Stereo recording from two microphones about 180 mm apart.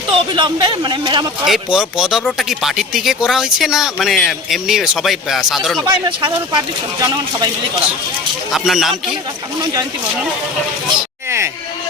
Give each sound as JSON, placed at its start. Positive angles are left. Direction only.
{"t": 0.1, "sound": "speech", "side_deg": -25}
{"t": 1.5, "sound": "speech", "side_deg": -5}
{"t": 5.8, "sound": "speech", "side_deg": -25}
{"t": 8.5, "sound": "speech", "side_deg": 0}
{"t": 10.8, "sound": "a sound", "side_deg": -15}